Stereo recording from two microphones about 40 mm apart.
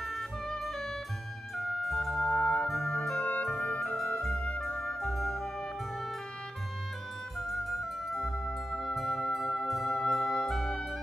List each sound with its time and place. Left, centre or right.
0.0 s music: centre
2.3 s music: left
3.6 s music: left; by 5.5 s centre
7.3 s music: centre